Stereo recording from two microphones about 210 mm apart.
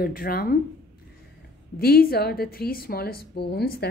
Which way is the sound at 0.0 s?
45° left (ahead or behind).